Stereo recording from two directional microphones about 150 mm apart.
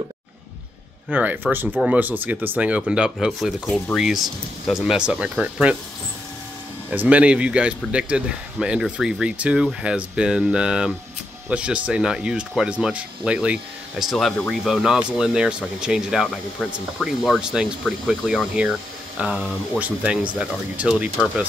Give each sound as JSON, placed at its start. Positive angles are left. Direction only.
{"t": 1.1, "sound": "speech", "side_deg": -10}
{"t": 6.9, "sound": "speech", "side_deg": -10}